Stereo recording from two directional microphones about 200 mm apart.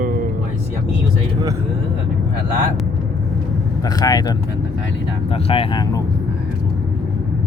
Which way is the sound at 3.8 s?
20° left (ahead or behind).